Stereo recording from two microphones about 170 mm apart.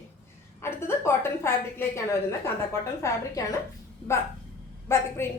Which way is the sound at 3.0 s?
15° left (ahead or behind).